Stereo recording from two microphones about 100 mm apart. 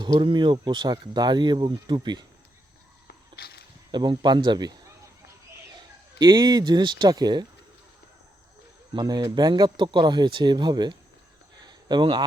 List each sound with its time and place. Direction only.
0.0 s speech: 50° right (ahead or behind)
3.9 s speech: 45° right (ahead or behind)
6.1 s speech: 45° right (ahead or behind)
9.0 s speech: 45° right (ahead or behind)
11.6 s a sound: 50° right (ahead or behind)